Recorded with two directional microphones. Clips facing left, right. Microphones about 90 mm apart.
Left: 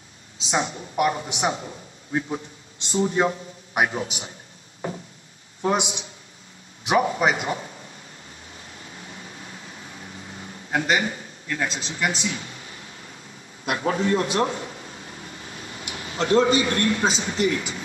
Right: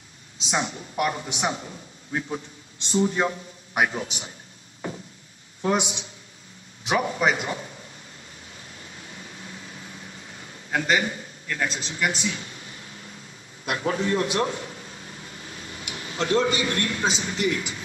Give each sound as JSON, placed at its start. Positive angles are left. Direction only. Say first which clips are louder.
{"t": 0.5, "sound": "a man's voice", "louder": "left 2 dB", "side_deg": 25}
{"t": 5.6, "sound": "a man's voice", "louder": "left 1 dB", "side_deg": 25}
{"t": 8.5, "sound": "a sound", "louder": "left 2 dB", "side_deg": 30}
{"t": 13.7, "sound": "a man's voice", "louder": "left 2 dB", "side_deg": 30}